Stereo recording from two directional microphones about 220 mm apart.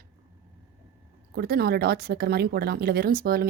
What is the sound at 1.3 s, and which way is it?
Speech, 45° right (ahead or behind).